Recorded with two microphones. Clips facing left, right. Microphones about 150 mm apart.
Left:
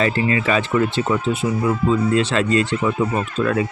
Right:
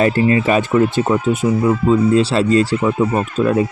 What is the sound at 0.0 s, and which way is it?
Speech, 40° right (ahead or behind).